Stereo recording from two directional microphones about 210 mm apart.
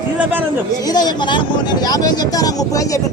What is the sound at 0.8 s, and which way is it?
Speech, 20° left (ahead or behind).